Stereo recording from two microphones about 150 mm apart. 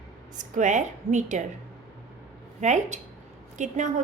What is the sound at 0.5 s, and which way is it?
Speech, 55° right (ahead or behind).